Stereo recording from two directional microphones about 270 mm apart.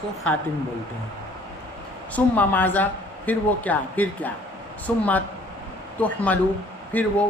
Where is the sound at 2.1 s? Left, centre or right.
Centre.